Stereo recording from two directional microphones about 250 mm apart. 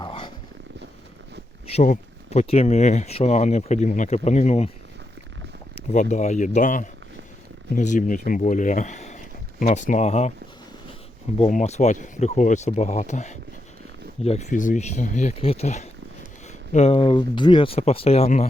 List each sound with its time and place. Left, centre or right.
0.0 s roaring cats: left
1.6 s speech: left
5.9 s speech: left
11.3 s speech: left